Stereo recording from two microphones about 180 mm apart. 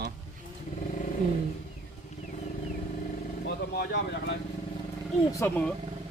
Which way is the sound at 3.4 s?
70° left (ahead or behind).